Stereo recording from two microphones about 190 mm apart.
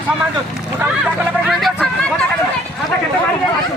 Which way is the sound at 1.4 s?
Centre (ahead or behind).